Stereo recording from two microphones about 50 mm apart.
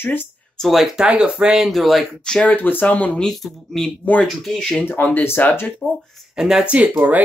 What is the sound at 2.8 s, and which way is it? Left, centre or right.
Speech, left.